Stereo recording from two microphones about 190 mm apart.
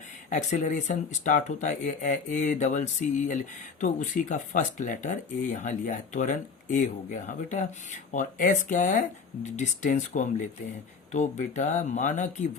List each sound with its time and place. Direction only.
0.3 s speech: 40° left (ahead or behind)